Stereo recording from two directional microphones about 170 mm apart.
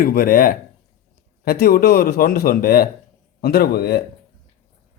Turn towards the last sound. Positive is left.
turn(degrees=70)  # may be behind; listen again after turning